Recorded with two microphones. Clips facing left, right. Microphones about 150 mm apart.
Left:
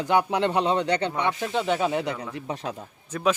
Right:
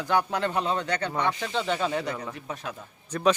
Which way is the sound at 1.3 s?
5° left (ahead or behind).